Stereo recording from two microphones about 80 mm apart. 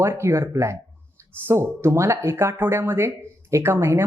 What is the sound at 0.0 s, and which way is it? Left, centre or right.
Speech, right.